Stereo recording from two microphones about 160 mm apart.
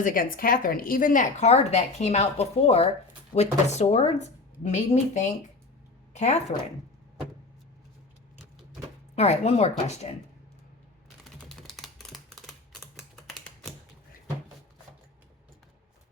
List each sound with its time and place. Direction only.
0.0 s a woman's voice: 60° left (ahead or behind); by 6.4 s 45° left (ahead or behind)
9.1 s speech: 40° left (ahead or behind)
11.4 s typing: centre (ahead or behind)
13.0 s typewriter: centre (ahead or behind)